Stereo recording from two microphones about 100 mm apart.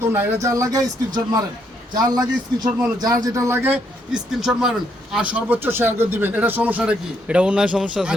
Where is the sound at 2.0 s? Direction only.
40° right (ahead or behind); by 3.7 s 25° right (ahead or behind).